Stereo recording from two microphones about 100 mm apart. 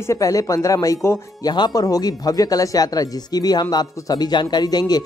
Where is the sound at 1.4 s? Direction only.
45° left (ahead or behind).